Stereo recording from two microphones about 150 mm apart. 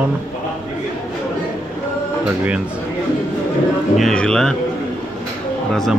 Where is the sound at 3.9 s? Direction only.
5° left (ahead or behind).